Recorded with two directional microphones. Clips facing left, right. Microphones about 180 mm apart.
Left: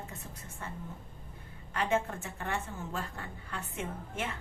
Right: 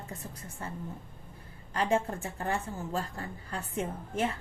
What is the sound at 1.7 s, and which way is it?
A woman's voice, 35° right (ahead or behind).